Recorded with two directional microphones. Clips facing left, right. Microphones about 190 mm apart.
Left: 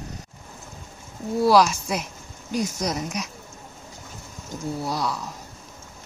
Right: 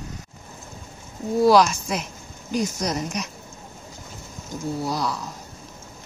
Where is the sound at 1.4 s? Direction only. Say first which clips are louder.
Right 1 dB; 5° left (ahead or behind).